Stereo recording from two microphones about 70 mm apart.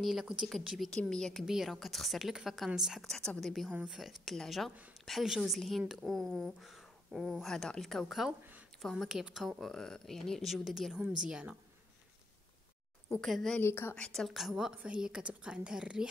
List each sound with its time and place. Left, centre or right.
0.0 s speech: centre
0.7 s a woman's voice: centre
1.4 s speech: centre
3.1 s speech: centre
7.4 s speech: centre
8.3 s speech: right
8.8 s speech: centre
9.6 s a woman's voice: centre
13.1 s speech: centre
13.6 s a woman's voice: left
14.1 s a woman's voice: centre